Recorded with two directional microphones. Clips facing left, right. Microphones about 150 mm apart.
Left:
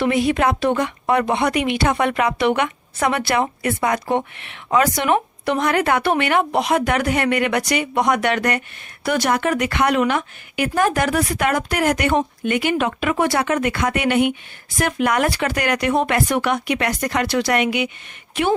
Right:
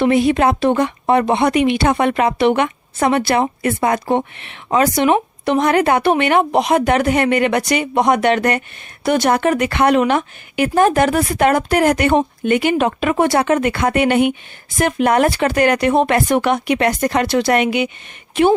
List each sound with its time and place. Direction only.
0.0 s a woman's voice: 30° right (ahead or behind)